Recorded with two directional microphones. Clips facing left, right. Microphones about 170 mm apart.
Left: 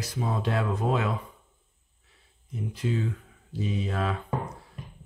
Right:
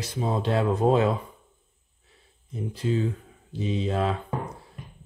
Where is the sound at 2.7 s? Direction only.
30° right (ahead or behind).